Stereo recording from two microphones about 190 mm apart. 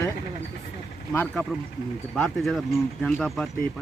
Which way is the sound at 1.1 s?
10° left (ahead or behind).